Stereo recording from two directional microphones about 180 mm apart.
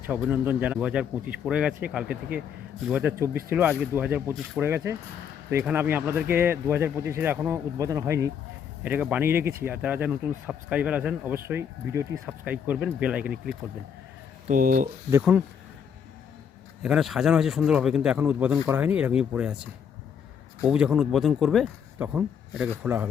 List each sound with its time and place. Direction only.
0.2 s speech: 10° right (ahead or behind)
14.4 s speech: 50° right (ahead or behind)
15.2 s speech: 5° right (ahead or behind)
16.8 s speech: centre (ahead or behind)
20.7 s speech: 5° right (ahead or behind)